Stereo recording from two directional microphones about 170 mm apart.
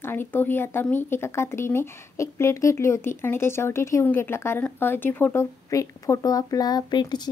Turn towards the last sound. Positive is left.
turn(degrees=25)  # may be behind; listen again after turning